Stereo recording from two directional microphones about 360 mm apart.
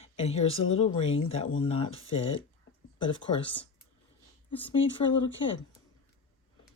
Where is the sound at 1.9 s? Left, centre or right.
Left.